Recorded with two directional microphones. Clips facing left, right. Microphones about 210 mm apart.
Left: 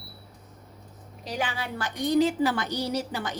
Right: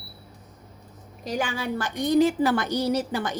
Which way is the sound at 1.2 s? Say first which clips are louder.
Right 4 dB; 45° right (ahead or behind).